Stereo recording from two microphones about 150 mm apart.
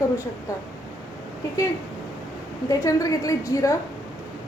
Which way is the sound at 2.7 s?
20° left (ahead or behind).